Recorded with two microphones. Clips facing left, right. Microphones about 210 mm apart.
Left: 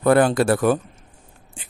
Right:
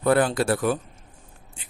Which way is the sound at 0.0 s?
60° left (ahead or behind).